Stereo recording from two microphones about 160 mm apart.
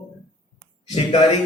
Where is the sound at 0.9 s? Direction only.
35° left (ahead or behind).